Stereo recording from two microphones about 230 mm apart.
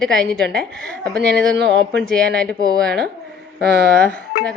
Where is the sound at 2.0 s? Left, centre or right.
Centre.